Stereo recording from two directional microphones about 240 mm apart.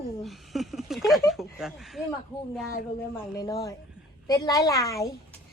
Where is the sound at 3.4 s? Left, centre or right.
Centre.